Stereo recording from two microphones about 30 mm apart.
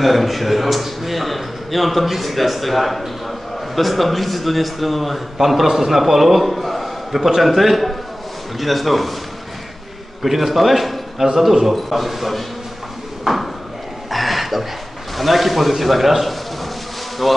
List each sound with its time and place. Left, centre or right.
0.0 s a man's voice: centre
7.2 s speech: centre
7.4 s a man's voice: centre
10.2 s a man's voice: centre
14.1 s a sound: centre
15.1 s a man's voice: centre